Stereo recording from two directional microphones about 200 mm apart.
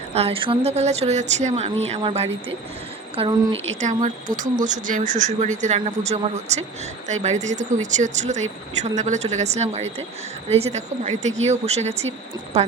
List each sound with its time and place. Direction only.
0.1 s speech: 30° right (ahead or behind)
3.8 s speech: 35° right (ahead or behind)